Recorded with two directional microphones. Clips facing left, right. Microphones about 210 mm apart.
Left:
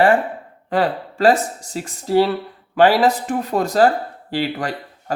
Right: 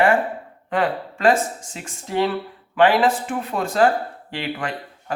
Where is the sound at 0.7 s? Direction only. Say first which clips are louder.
Left 2 dB; 35° left (ahead or behind).